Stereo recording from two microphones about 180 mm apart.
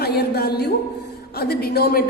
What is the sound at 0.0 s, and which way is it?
A woman's voice, 60° left (ahead or behind).